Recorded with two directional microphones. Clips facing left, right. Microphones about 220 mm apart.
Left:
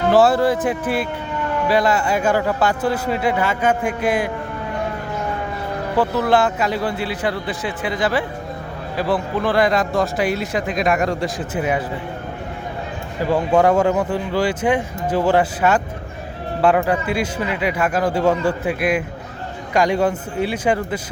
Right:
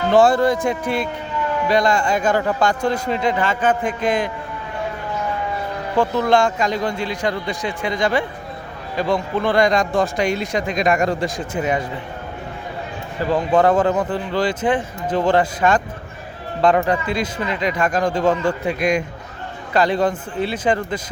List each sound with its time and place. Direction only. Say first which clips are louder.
0.1 s speech: right 1 dB; 5° left (ahead or behind)
6.0 s speech: right 1 dB; 5° left (ahead or behind)
13.3 s speech: even; 10° left (ahead or behind)